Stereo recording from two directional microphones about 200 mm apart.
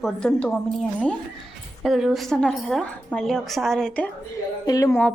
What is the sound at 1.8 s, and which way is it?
A woman's voice, centre (ahead or behind).